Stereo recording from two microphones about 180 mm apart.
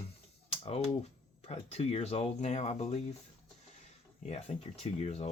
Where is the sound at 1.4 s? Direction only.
35° left (ahead or behind).